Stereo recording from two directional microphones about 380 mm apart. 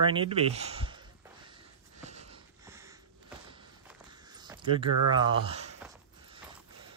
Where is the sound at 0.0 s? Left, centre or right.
Centre.